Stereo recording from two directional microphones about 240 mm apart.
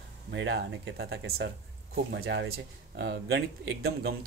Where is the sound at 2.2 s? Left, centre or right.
Right.